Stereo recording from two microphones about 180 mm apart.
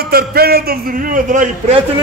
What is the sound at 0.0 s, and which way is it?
A man's voice, 60° right (ahead or behind).